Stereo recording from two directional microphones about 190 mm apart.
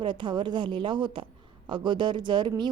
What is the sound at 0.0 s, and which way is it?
Speech, 25° right (ahead or behind).